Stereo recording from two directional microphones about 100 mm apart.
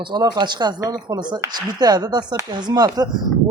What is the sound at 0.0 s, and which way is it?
Speech, 45° right (ahead or behind).